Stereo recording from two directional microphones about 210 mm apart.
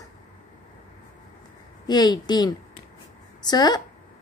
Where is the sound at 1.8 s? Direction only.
20° left (ahead or behind).